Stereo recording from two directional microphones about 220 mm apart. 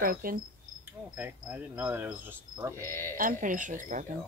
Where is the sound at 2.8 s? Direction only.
10° left (ahead or behind).